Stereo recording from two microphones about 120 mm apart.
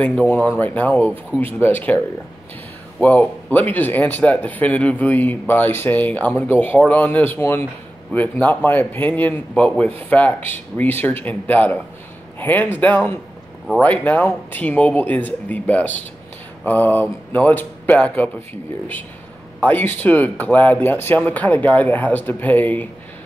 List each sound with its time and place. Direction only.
0.0 s speech: 10° left (ahead or behind)
3.0 s speech: 15° left (ahead or behind)
19.6 s speech: 15° left (ahead or behind)